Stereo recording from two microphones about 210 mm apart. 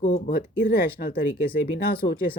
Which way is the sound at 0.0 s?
40° left (ahead or behind).